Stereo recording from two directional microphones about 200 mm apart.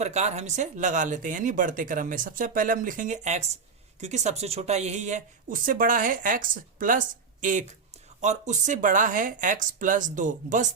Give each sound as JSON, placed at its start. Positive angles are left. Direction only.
{"t": 0.0, "sound": "speech", "side_deg": -35}